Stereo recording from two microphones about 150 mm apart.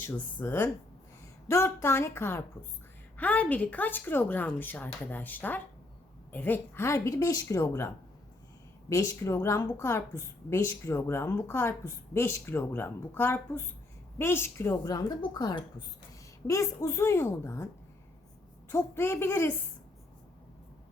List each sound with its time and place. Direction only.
0.0 s a woman's voice: 15° left (ahead or behind)
18.7 s a woman's voice: 15° left (ahead or behind)